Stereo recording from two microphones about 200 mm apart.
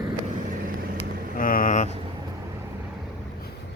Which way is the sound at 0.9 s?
45° left (ahead or behind).